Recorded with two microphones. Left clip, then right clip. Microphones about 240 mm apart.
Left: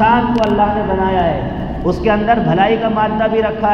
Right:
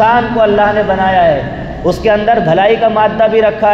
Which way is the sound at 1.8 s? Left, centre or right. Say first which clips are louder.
Right 4 dB; right.